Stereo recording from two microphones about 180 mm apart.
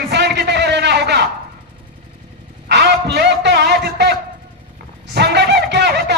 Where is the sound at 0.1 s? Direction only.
70° right (ahead or behind).